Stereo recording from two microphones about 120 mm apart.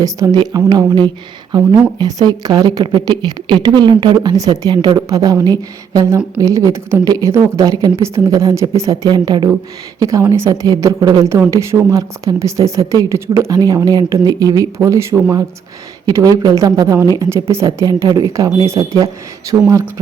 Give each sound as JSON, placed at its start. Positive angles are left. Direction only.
{"t": 0.0, "sound": "a woman's voice", "side_deg": -30}